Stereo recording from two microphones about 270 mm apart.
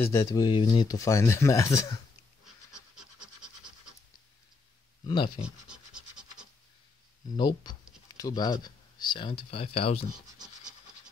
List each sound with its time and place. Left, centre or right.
0.0 s speech: centre
2.4 s scratch: centre
5.0 s speech: centre
5.4 s scratch: centre
7.2 s speech: centre